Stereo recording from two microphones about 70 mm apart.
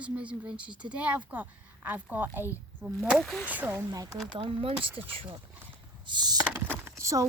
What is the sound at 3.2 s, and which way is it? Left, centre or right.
Speech, centre.